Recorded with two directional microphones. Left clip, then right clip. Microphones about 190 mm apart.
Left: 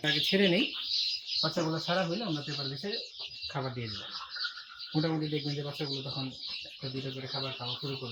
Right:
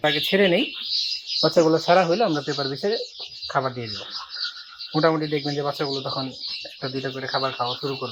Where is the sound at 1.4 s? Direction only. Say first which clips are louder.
Right 16 dB; 40° right (ahead or behind).